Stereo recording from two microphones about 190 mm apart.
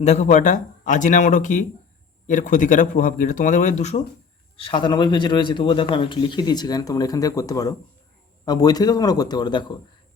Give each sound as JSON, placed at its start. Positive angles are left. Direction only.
{"t": 0.0, "sound": "a man's voice", "side_deg": 40}